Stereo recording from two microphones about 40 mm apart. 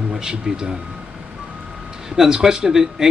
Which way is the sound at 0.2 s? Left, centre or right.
Centre.